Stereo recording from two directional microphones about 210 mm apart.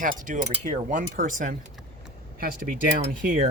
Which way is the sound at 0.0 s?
35° right (ahead or behind).